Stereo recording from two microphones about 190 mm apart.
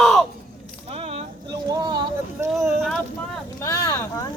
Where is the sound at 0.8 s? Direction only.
30° right (ahead or behind).